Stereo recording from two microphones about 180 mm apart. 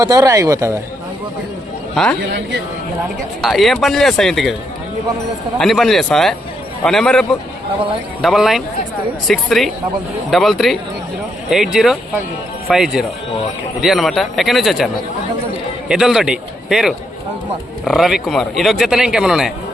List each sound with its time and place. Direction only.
0.0 s speech: 20° right (ahead or behind)
3.4 s speech: centre (ahead or behind)
5.5 s speech: centre (ahead or behind)
15.9 s speech: centre (ahead or behind)